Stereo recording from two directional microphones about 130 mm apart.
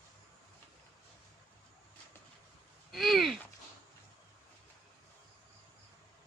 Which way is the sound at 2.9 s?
Centre (ahead or behind).